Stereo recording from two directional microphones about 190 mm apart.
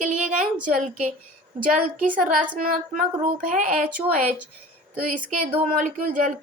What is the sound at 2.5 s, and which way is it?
A woman's voice, 50° right (ahead or behind).